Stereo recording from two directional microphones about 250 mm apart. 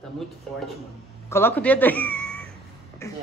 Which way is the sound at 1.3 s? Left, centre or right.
Centre.